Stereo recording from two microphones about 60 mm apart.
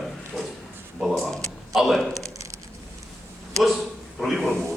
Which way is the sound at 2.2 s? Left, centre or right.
Right.